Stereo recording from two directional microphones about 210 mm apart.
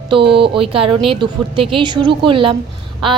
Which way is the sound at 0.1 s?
25° right (ahead or behind).